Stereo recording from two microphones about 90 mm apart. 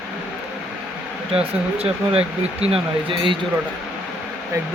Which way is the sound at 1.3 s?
90° right.